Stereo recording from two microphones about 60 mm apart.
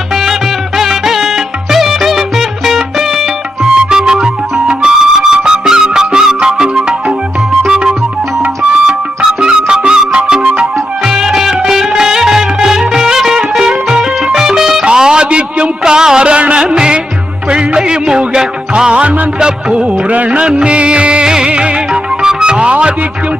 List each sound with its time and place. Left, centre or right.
0.8 s music: centre
9.4 s music: centre
14.8 s a sound: centre
17.5 s music: centre